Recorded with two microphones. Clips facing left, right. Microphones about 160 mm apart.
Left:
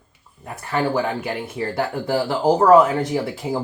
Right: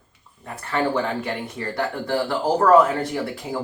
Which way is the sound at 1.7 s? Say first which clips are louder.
Left 1 dB; 20° left (ahead or behind).